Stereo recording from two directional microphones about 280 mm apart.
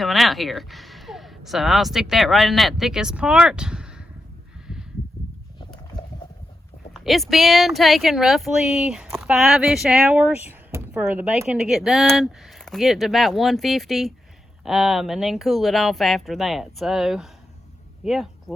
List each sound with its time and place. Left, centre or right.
0.0 s speech: centre
4.7 s a sound: centre
6.9 s speech: centre